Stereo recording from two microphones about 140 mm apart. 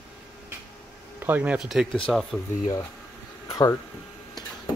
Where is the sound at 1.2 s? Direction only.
10° right (ahead or behind).